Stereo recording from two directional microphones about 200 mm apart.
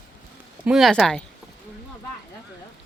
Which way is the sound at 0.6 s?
Centre (ahead or behind).